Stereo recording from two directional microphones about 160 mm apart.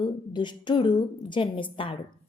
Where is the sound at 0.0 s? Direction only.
30° left (ahead or behind).